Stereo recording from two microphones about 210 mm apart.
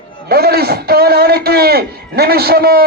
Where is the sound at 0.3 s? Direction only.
45° right (ahead or behind).